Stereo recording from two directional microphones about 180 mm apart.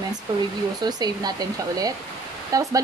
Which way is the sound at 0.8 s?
20° right (ahead or behind).